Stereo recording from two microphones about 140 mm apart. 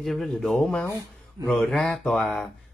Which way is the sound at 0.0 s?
Centre (ahead or behind).